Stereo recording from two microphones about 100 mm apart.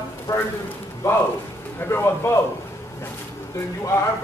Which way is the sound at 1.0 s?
30° left (ahead or behind).